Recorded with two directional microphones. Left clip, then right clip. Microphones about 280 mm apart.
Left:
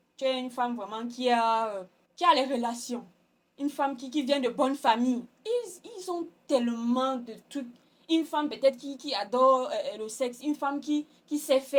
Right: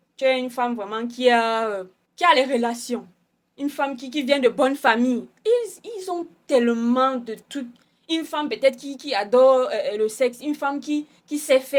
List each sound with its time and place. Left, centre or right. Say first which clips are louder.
0.2 s a woman's voice: right 8 dB; right